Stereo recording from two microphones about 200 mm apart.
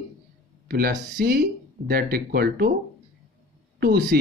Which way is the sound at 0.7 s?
50° right (ahead or behind).